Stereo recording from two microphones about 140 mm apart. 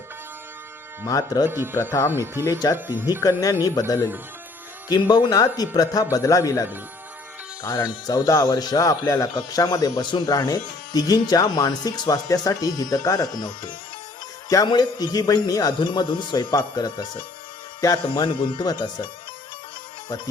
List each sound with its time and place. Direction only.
1.0 s speech: 25° left (ahead or behind)
1.5 s speech: 15° right (ahead or behind)
1.9 s speech: 20° left (ahead or behind)
2.7 s speech: 15° right (ahead or behind)
3.4 s speech: 25° left (ahead or behind)
18.1 s speech: 35° left (ahead or behind)